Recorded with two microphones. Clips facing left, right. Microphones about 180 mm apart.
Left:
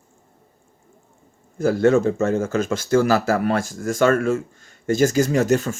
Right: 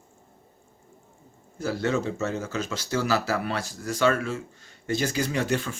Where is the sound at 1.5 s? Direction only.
50° left (ahead or behind).